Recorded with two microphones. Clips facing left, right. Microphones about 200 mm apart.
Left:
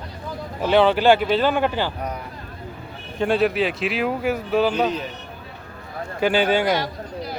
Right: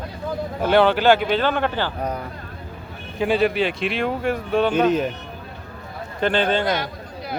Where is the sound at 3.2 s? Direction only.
Centre (ahead or behind).